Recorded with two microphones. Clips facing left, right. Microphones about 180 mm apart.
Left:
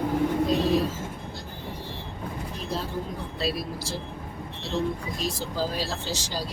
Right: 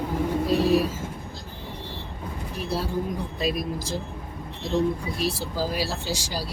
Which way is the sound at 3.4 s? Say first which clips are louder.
Right 1 dB; 15° right (ahead or behind).